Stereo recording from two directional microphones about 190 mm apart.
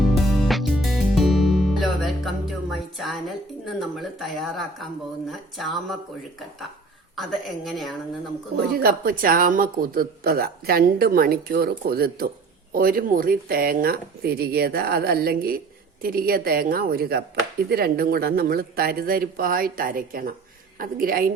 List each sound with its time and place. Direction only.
0.0 s music: centre (ahead or behind)
3.8 s speech: centre (ahead or behind)
7.2 s speech: centre (ahead or behind)
8.7 s speech: 50° right (ahead or behind)